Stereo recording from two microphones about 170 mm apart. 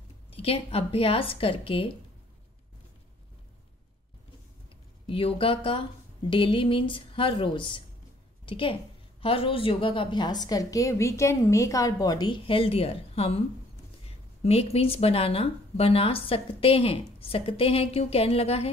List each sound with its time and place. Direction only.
0.3 s speech: 35° left (ahead or behind)
5.0 s a woman's voice: 30° left (ahead or behind)